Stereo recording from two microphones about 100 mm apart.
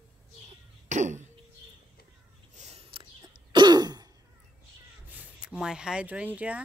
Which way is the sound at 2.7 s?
90° right.